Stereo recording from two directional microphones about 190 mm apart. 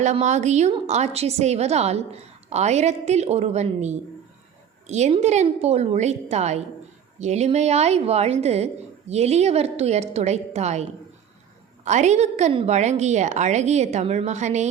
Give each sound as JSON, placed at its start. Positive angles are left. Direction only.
{"t": 0.0, "sound": "a woman's voice", "side_deg": -40}
{"t": 11.9, "sound": "a woman's voice", "side_deg": -35}